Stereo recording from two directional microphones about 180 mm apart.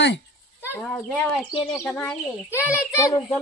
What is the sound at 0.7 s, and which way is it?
Speech, 15° left (ahead or behind).